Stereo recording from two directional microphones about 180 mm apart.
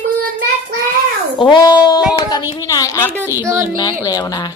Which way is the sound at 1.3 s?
25° left (ahead or behind).